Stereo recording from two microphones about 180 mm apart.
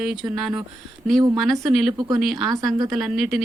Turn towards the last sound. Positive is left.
turn(degrees=0)  # may be behind; listen again after turning